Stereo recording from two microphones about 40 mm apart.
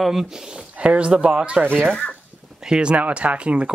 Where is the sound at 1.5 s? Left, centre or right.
Right.